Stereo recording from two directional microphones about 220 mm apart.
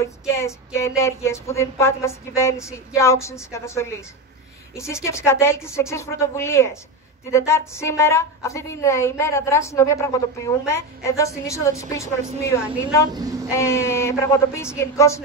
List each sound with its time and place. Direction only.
0.3 s a woman's voice: 15° left (ahead or behind)